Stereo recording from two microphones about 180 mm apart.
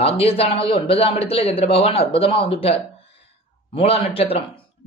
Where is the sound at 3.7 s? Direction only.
30° left (ahead or behind).